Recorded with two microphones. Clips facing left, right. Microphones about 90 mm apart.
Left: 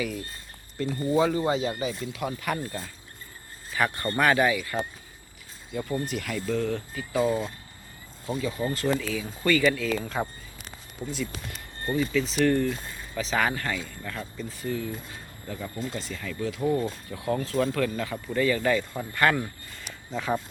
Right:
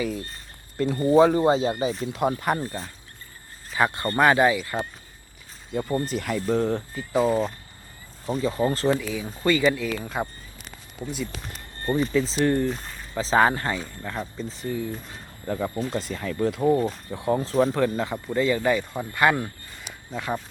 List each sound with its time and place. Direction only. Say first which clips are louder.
0.8 s speech: right 6 dB; 45° right (ahead or behind); by 2.0 s 25° right (ahead or behind)
2.1 s speech: right 7 dB; 40° right (ahead or behind)
3.7 s speech: right 3 dB; 20° right (ahead or behind)
6.1 s speech: right 6 dB; 40° right (ahead or behind)
8.9 s speech: right 3 dB; 20° right (ahead or behind)
11.9 s speech: right 2 dB; 35° right (ahead or behind)
12.4 s speech: left 1 dB; 20° right (ahead or behind)
13.1 s speech: right 6 dB; 30° right (ahead or behind); by 15.2 s 15° right (ahead or behind)
15.4 s speech: right 7 dB; 45° right (ahead or behind)
16.6 s speech: right 3 dB; 20° right (ahead or behind)
20.1 s speech: left 1 dB; 5° right (ahead or behind)